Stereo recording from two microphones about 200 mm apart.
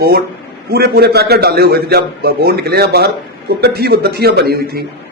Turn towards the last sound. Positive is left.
turn(degrees=-50)  # may be behind; listen again after turning